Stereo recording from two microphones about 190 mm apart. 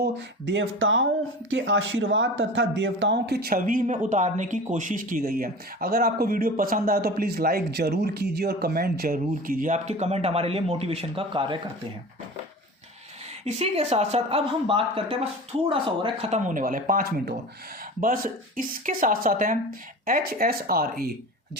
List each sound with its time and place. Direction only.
0.4 s speech: 85° right
1.5 s speech: 75° right (ahead or behind); by 11.6 s 25° right (ahead or behind)
13.4 s speech: 35° right (ahead or behind); by 21.6 s 55° right (ahead or behind)